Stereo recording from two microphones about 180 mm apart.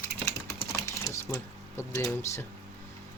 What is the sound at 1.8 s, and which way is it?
Speech, 15° left (ahead or behind).